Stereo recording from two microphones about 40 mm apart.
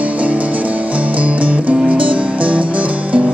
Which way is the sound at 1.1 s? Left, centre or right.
Right.